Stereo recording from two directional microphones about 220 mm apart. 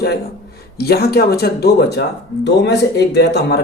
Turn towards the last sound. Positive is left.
turn(degrees=50)  # may be behind; listen again after turning